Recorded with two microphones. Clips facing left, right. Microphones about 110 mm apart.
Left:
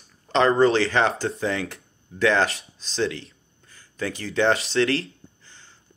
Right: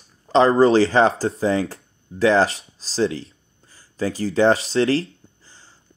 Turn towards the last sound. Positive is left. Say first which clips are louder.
# even
turn(degrees=-35)  # may be behind; listen again after turning